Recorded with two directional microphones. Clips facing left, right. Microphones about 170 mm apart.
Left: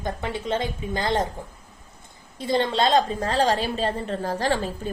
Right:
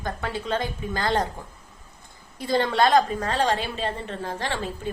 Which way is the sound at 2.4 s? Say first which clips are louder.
Right 1 dB; 20° left (ahead or behind).